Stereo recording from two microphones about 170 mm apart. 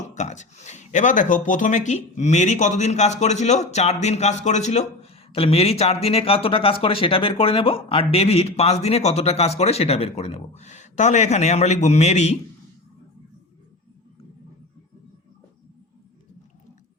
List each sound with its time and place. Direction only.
0.1 s speech: 45° left (ahead or behind)